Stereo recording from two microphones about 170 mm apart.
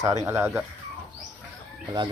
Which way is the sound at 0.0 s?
20° right (ahead or behind).